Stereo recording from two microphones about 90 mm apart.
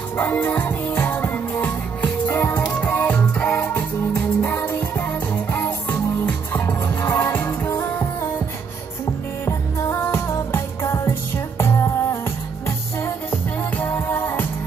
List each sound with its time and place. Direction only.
0.2 s music: 20° left (ahead or behind)
9.5 s music: 35° left (ahead or behind)